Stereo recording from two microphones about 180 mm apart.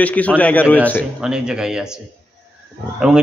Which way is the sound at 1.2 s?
5° right (ahead or behind).